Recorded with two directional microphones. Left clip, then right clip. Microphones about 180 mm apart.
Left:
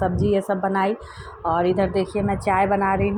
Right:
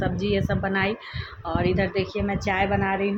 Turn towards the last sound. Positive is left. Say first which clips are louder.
# left 4 dB
turn(degrees=10)  # may be behind; listen again after turning